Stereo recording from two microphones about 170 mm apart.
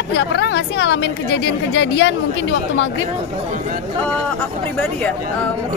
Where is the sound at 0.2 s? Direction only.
90° left.